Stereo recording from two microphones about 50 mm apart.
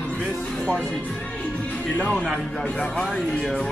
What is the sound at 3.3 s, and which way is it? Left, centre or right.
Speech, centre.